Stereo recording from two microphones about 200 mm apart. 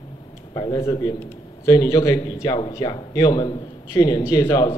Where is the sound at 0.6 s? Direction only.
15° left (ahead or behind).